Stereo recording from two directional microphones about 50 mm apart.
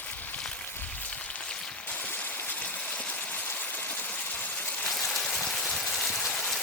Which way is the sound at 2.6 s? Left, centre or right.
Left.